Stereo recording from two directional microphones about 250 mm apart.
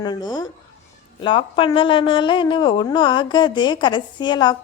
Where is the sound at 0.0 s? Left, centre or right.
Centre.